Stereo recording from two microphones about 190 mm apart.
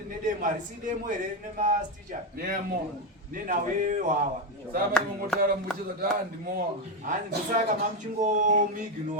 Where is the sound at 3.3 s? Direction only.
45° right (ahead or behind).